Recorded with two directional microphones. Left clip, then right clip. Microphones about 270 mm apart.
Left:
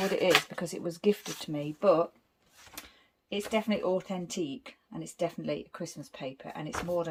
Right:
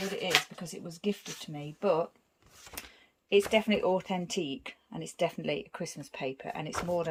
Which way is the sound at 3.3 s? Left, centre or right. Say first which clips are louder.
Right 5 dB; centre.